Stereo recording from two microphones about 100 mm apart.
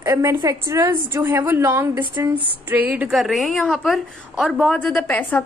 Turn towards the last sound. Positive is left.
turn(degrees=15)  # may be behind; listen again after turning